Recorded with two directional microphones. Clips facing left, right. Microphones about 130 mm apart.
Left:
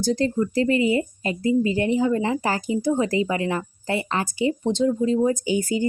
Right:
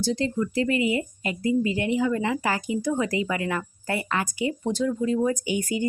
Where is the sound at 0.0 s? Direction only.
45° left (ahead or behind).